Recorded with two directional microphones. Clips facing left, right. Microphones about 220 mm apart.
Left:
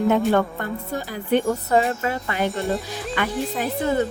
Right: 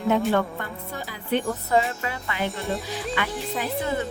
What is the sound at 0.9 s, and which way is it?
Speech, 45° left (ahead or behind).